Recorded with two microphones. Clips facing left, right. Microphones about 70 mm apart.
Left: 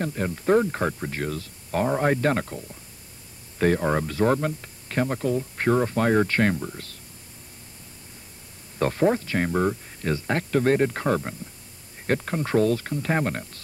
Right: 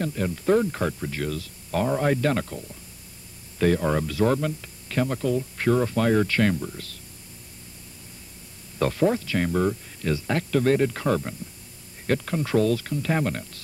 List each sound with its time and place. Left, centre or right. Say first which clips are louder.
0.0 s speech: even; left
8.7 s speech: left 1 dB; left